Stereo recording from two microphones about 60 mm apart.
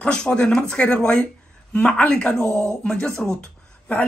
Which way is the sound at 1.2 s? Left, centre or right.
Left.